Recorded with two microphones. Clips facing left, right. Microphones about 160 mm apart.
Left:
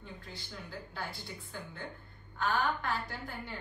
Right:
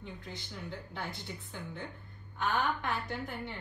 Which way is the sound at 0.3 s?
20° right (ahead or behind).